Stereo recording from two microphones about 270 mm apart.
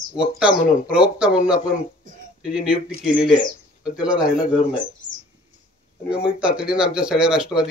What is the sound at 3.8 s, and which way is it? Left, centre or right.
Speech, centre.